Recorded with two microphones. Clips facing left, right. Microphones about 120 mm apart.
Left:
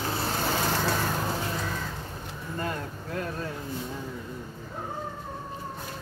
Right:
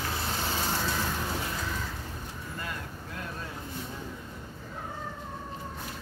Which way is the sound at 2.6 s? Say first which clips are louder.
Left 8 dB; 40° left (ahead or behind).